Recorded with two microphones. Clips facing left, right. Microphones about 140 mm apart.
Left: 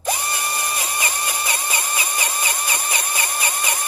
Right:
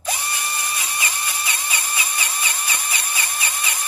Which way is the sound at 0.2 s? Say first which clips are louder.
Left 3 dB; 40° left (ahead or behind).